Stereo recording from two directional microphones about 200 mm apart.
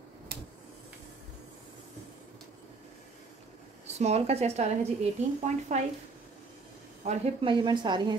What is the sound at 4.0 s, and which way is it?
A woman's voice, 35° right (ahead or behind).